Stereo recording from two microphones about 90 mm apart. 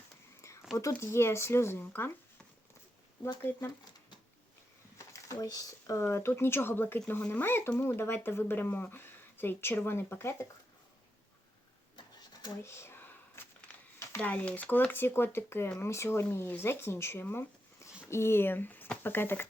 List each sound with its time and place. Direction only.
0.4 s whispering: 30° left (ahead or behind)
0.8 s speech: 35° left (ahead or behind)
4.9 s speech: 40° left (ahead or behind)
12.6 s speech: 30° left (ahead or behind)